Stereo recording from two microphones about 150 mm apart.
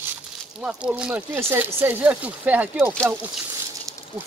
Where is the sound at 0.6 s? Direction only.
5° right (ahead or behind).